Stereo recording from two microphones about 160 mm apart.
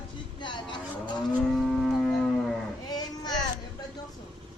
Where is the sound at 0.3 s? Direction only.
30° left (ahead or behind).